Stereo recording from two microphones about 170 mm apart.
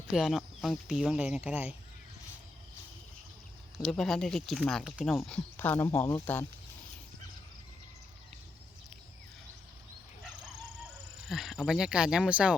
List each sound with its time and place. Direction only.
0.1 s speech: centre (ahead or behind)
3.8 s speech: centre (ahead or behind)
5.5 s speech: 15° left (ahead or behind)
6.1 s speech: 20° left (ahead or behind)
11.3 s speech: centre (ahead or behind)